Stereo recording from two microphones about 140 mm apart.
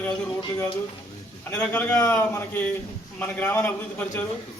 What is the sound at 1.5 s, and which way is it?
A man's voice, 10° left (ahead or behind).